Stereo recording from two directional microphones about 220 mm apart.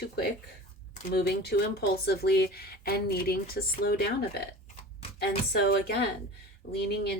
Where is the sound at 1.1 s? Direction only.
45° left (ahead or behind).